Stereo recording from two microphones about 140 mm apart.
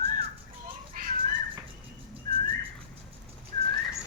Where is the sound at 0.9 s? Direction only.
85° right.